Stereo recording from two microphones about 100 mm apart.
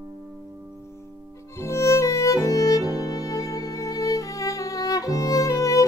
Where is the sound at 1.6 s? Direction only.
30° left (ahead or behind).